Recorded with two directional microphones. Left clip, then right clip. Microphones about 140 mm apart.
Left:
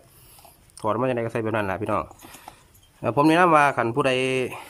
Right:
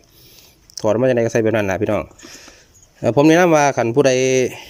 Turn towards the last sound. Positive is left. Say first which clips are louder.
# right 8 dB
turn(degrees=-25)  # may be behind; listen again after turning